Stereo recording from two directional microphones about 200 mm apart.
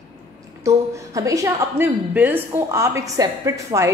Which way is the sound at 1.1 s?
15° right (ahead or behind).